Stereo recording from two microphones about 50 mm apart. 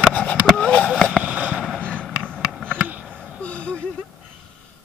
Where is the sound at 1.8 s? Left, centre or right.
Left.